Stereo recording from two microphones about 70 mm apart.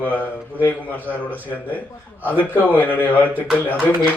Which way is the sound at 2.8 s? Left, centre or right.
Left.